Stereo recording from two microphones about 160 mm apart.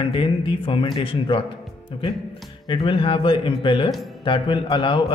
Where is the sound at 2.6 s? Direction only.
30° left (ahead or behind).